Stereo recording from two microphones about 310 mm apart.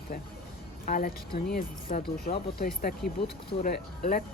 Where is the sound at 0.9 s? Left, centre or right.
Left.